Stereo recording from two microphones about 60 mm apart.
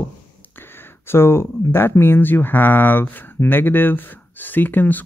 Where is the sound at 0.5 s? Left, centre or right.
Left.